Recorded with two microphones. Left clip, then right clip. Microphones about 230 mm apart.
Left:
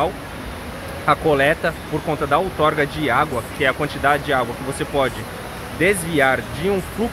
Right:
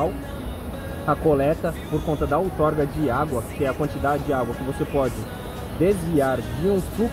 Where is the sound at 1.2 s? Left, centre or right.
Left.